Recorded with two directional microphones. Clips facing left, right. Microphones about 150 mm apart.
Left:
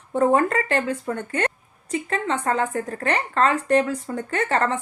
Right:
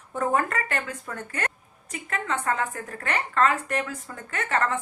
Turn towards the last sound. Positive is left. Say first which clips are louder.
# left 4 dB
turn(degrees=30)  # may be behind; listen again after turning